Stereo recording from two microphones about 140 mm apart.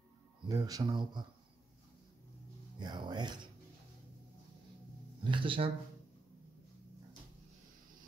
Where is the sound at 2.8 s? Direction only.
30° right (ahead or behind).